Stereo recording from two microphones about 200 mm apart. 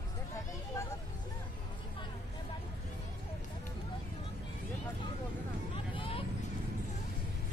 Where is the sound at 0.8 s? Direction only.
15° left (ahead or behind).